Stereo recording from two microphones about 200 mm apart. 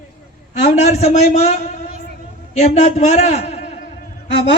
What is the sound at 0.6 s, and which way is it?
Speech, 35° left (ahead or behind).